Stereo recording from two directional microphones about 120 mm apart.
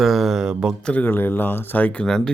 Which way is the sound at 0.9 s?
15° left (ahead or behind).